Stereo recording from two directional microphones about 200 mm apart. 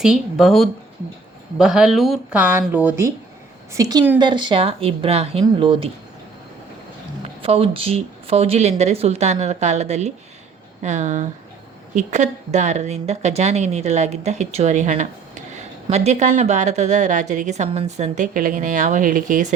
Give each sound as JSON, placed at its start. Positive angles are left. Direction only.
{"t": 0.0, "sound": "a woman's voice", "side_deg": 0}
{"t": 7.4, "sound": "a woman's voice", "side_deg": -30}